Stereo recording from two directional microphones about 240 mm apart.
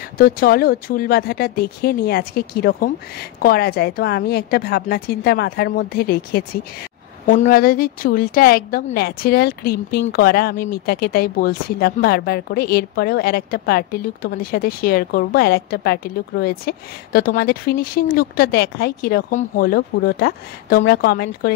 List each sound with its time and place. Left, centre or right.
0.2 s a woman's voice: left